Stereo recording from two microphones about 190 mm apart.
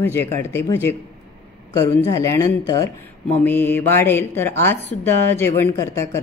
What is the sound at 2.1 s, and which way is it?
Speech, 15° left (ahead or behind).